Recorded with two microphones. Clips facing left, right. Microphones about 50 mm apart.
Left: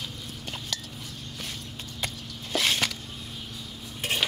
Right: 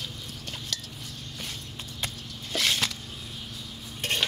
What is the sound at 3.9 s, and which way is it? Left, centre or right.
Dishes, centre.